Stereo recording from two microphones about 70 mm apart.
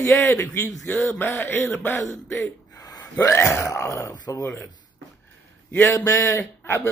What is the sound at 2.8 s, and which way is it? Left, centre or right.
Gasp, left.